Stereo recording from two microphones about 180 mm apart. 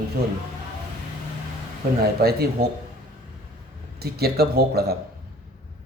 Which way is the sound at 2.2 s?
60° right (ahead or behind).